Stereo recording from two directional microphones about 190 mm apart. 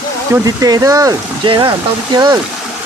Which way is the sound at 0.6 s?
20° right (ahead or behind).